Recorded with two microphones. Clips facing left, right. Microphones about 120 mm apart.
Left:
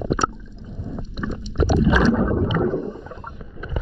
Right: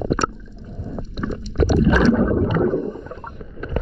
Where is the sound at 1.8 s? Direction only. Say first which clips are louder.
Right 2 dB; 10° left (ahead or behind).